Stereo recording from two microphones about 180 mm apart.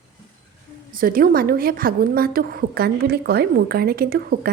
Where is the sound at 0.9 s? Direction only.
50° right (ahead or behind).